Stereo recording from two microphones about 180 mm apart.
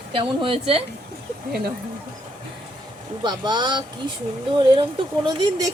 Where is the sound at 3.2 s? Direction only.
25° right (ahead or behind).